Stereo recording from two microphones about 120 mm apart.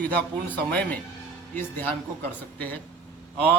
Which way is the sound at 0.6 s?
10° left (ahead or behind).